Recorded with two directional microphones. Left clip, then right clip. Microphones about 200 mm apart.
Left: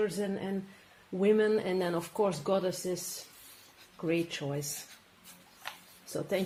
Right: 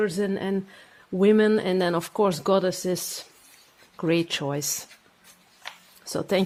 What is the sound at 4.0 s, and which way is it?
Speech, 55° right (ahead or behind).